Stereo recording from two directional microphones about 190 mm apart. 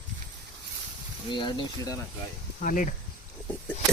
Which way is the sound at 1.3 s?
25° left (ahead or behind).